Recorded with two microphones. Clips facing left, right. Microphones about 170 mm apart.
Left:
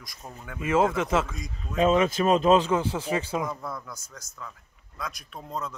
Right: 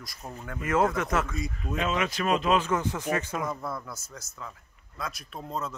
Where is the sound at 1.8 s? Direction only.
30° left (ahead or behind).